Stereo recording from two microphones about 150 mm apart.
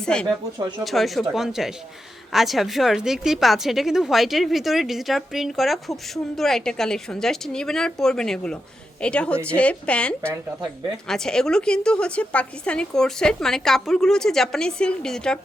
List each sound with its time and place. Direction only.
0.0 s a woman's voice: 5° left (ahead or behind)